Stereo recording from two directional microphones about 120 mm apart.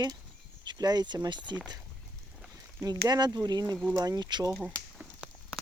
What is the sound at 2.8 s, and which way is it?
Speech, 30° right (ahead or behind).